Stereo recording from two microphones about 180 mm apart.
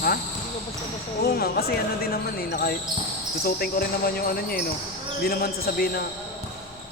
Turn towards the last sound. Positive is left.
turn(degrees=55)  # may be behind; listen again after turning